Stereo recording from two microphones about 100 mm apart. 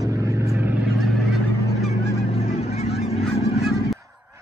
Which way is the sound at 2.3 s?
80° left.